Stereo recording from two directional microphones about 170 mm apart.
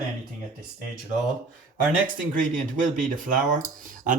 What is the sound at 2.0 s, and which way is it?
Speech, 50° right (ahead or behind).